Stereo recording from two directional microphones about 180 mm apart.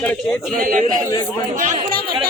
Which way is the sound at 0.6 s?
50° right (ahead or behind).